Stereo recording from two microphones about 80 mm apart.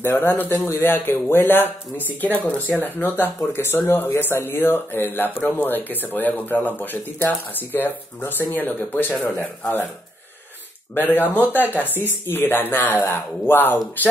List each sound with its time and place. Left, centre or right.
0.0 s speech: left
11.0 s speech: left